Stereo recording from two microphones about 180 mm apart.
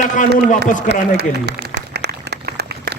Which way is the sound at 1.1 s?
65° right (ahead or behind).